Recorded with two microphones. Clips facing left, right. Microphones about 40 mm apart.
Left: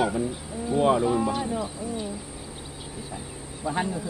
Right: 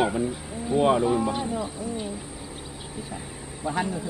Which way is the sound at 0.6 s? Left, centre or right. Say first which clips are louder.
Right 1 dB; centre.